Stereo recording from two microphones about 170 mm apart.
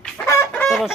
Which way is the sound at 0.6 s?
Centre (ahead or behind).